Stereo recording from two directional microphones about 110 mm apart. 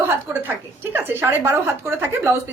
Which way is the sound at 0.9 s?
20° right (ahead or behind).